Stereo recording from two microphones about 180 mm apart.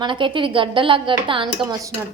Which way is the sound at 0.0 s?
25° right (ahead or behind).